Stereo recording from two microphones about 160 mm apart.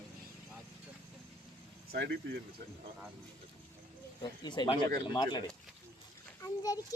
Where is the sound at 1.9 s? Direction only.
90° right.